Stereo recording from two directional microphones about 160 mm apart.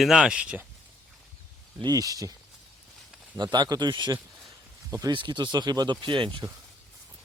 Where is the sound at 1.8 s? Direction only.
20° right (ahead or behind).